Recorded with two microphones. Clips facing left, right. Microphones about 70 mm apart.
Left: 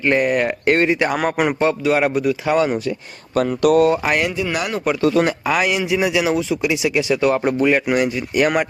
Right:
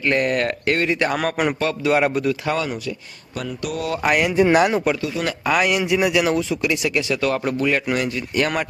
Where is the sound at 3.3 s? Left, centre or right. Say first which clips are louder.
Left 12 dB; left.